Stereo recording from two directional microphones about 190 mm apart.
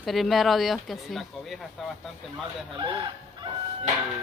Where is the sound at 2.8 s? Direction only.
25° right (ahead or behind).